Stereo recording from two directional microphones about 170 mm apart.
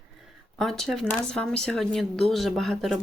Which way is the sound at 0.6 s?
Centre (ahead or behind).